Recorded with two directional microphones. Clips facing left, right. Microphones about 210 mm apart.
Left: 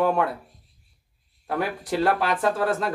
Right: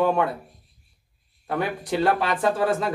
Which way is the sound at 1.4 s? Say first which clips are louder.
Right 1 dB; 5° left (ahead or behind).